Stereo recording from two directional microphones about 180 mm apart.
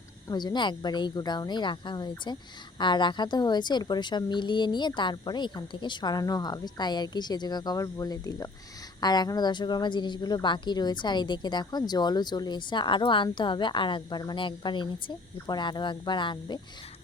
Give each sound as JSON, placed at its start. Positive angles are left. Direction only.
{"t": 0.3, "sound": "a woman's voice", "side_deg": 25}